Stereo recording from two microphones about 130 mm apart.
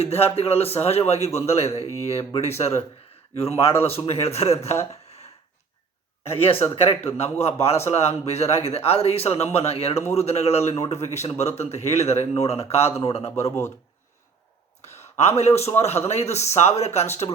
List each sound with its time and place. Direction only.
0.0 s speech: 50° left (ahead or behind)
1.8 s speech: 25° right (ahead or behind)
2.3 s speech: 55° left (ahead or behind)
4.9 s a sound: 55° left (ahead or behind)
6.2 s speech: 45° left (ahead or behind)
9.9 s speech: 20° left (ahead or behind)
10.2 s speech: 55° left (ahead or behind)
13.3 s speech: 20° left (ahead or behind)
14.9 s a sound: 20° left (ahead or behind)
15.4 s speech: 55° left (ahead or behind)